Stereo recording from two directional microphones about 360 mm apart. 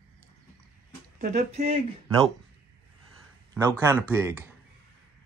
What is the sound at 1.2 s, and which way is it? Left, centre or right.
Speech, centre.